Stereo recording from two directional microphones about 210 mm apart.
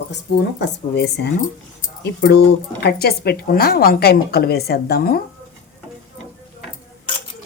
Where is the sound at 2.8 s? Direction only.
50° left (ahead or behind).